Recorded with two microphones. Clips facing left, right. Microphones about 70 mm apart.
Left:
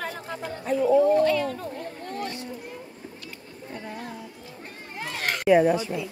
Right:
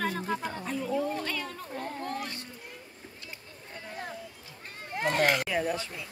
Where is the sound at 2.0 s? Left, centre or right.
Centre.